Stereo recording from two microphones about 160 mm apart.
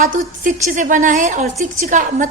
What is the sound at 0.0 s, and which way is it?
A woman's voice, 55° right (ahead or behind).